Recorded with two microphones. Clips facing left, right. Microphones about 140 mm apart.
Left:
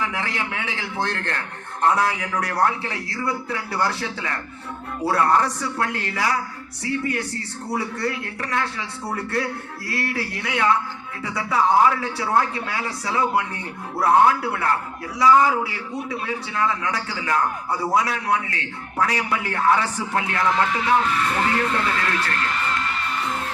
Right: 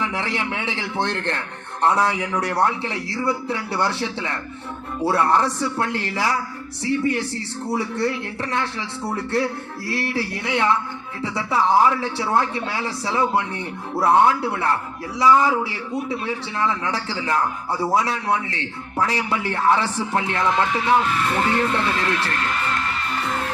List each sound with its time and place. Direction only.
0.0 s a man's voice: 25° right (ahead or behind)